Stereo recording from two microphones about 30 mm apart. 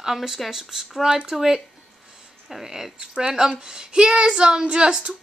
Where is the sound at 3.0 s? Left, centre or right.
Right.